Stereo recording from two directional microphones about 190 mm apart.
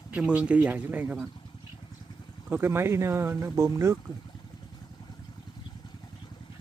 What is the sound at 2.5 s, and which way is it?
Speech, 15° right (ahead or behind).